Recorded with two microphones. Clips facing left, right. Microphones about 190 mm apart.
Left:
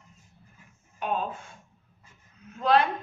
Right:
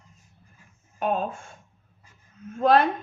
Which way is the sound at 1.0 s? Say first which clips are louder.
Right 4 dB; 45° right (ahead or behind).